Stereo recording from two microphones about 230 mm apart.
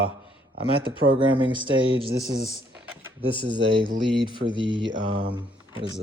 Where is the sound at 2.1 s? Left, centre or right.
Right.